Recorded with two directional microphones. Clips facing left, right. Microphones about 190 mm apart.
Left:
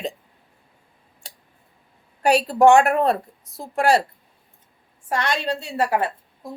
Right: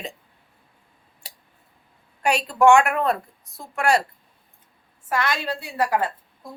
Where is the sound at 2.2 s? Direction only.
35° left (ahead or behind).